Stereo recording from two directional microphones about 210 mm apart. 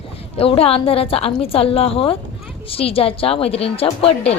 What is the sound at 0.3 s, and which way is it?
A woman's voice, 25° left (ahead or behind).